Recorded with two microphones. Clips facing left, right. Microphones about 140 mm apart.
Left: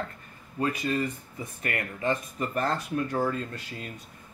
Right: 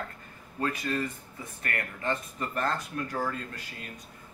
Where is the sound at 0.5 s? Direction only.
15° left (ahead or behind).